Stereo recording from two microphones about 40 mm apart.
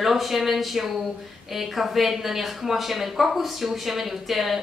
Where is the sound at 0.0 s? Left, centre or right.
Centre.